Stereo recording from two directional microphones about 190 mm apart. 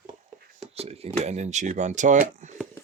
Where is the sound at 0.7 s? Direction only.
30° right (ahead or behind).